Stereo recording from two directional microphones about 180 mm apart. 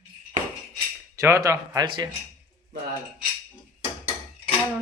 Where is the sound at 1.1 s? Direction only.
15° right (ahead or behind).